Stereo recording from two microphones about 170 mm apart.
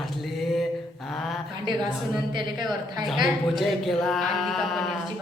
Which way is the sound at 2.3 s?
25° right (ahead or behind).